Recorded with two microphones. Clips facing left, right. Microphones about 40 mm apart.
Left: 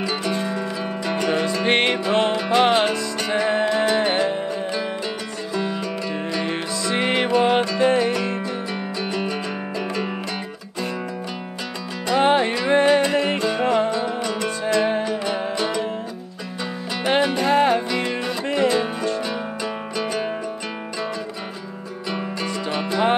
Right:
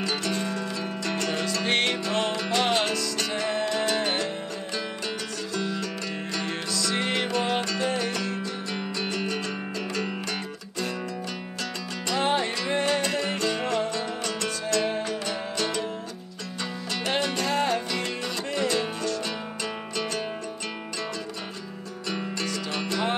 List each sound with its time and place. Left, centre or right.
0.0 s music: centre
5.5 s music: left
12.2 s music: left
17.0 s music: centre
22.1 s music: centre